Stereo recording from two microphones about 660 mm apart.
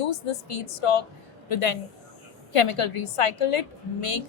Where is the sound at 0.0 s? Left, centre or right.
Left.